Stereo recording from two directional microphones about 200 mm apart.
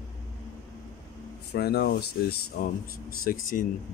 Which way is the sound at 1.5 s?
50° left (ahead or behind).